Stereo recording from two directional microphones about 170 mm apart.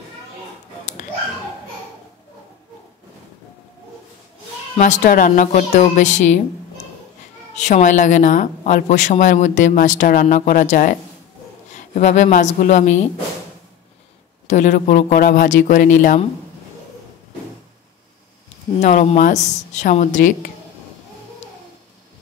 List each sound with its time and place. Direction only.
4.7 s speech: 45° left (ahead or behind)
7.5 s speech: 45° left (ahead or behind)
14.5 s speech: 45° left (ahead or behind)
18.8 s speech: 45° left (ahead or behind)